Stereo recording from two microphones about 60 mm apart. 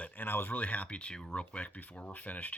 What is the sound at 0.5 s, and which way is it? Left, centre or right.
Speech, left.